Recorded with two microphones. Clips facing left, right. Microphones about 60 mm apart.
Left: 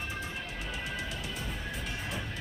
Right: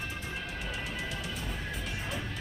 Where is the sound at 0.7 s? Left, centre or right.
Centre.